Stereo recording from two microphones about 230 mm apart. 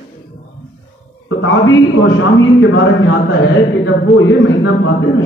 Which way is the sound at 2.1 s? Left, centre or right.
Left.